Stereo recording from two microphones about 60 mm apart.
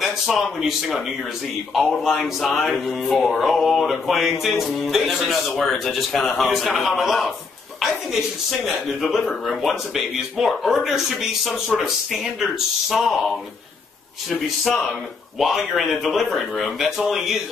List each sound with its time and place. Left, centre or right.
0.0 s speech: centre
9.5 s speech: centre
15.3 s speech: centre